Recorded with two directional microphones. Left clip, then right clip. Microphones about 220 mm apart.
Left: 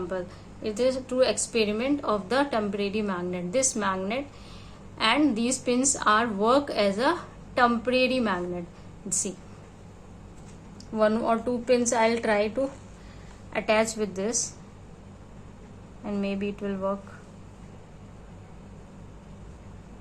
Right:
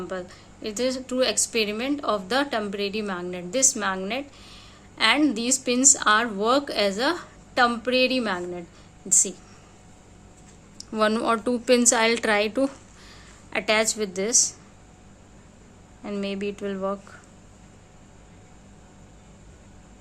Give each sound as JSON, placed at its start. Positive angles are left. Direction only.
{"t": 0.1, "sound": "a woman's voice", "side_deg": -30}
{"t": 10.8, "sound": "a woman's voice", "side_deg": -40}
{"t": 16.0, "sound": "a woman's voice", "side_deg": -30}